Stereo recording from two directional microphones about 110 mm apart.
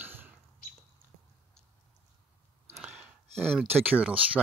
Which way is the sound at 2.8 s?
5° right (ahead or behind).